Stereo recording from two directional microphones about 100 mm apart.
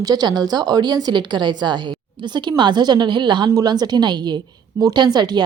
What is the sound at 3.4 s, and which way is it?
A woman's voice, 40° right (ahead or behind).